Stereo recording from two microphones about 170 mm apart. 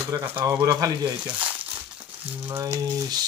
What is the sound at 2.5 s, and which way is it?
Speech, 20° right (ahead or behind).